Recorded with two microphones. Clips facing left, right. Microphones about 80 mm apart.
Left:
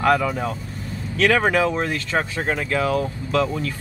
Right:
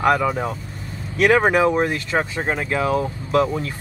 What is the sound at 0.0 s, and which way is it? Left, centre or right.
Speech, centre.